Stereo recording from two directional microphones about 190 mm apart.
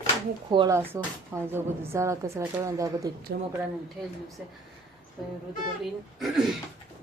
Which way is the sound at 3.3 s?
50° right (ahead or behind).